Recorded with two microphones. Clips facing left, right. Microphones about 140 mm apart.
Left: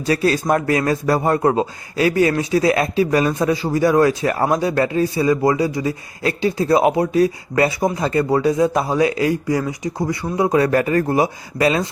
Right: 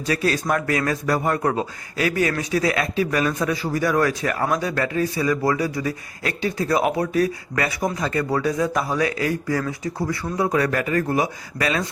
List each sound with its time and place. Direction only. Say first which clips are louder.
0.0 s a man's voice: left 4 dB; 35° left (ahead or behind)